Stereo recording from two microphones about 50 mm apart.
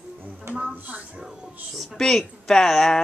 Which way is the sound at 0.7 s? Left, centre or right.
Right.